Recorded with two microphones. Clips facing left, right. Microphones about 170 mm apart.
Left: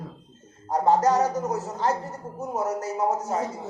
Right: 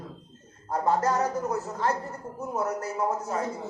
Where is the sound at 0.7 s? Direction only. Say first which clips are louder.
Left 5 dB; 30° left (ahead or behind).